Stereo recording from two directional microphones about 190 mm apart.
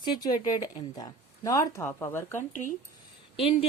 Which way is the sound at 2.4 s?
45° left (ahead or behind).